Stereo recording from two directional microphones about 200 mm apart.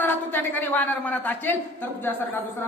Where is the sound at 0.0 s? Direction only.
10° left (ahead or behind).